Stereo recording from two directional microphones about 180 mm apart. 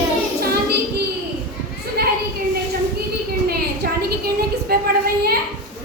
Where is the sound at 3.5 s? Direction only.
60° right (ahead or behind).